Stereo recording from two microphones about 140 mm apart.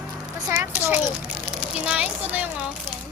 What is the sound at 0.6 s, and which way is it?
A child's voice, 15° right (ahead or behind).